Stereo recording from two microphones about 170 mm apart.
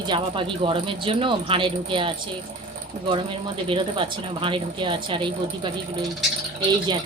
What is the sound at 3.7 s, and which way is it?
A woman's voice, 30° right (ahead or behind).